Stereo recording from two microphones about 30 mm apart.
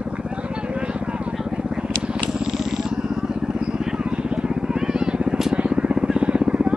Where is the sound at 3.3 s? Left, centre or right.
Right.